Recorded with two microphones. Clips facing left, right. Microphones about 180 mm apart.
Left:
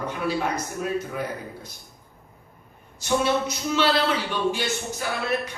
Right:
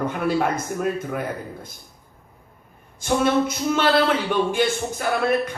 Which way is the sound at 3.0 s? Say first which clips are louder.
Right 3 dB; 50° right (ahead or behind).